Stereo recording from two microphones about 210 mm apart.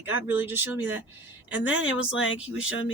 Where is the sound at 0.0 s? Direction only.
10° right (ahead or behind).